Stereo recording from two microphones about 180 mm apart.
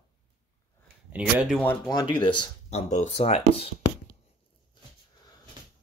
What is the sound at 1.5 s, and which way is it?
Speech, 5° left (ahead or behind).